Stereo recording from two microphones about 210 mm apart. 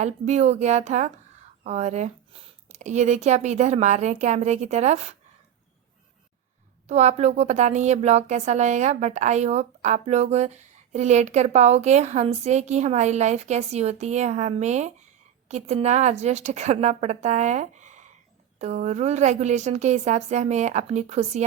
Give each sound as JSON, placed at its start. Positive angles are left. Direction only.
{"t": 0.0, "sound": "speech", "side_deg": -30}
{"t": 6.8, "sound": "speech", "side_deg": -30}